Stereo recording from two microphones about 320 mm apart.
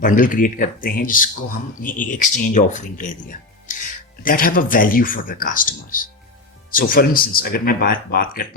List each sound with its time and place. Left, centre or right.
0.0 s speech: left